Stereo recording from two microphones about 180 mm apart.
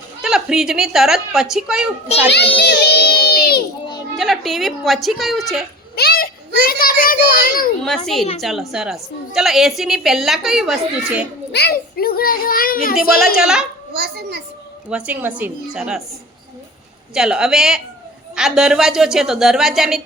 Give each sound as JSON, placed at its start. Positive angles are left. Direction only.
{"t": 0.2, "sound": "a woman's voice", "side_deg": 0}
{"t": 2.6, "sound": "a sound", "side_deg": 65}
{"t": 4.2, "sound": "a woman's voice", "side_deg": 0}
{"t": 6.0, "sound": "a child's voice", "side_deg": 60}
{"t": 7.9, "sound": "a woman's voice", "side_deg": 0}
{"t": 11.5, "sound": "a child's voice", "side_deg": 60}
{"t": 13.4, "sound": "a woman's voice", "side_deg": -5}
{"t": 13.9, "sound": "a child's voice", "side_deg": -60}
{"t": 14.8, "sound": "a woman's voice", "side_deg": -5}
{"t": 17.2, "sound": "a woman's voice", "side_deg": -5}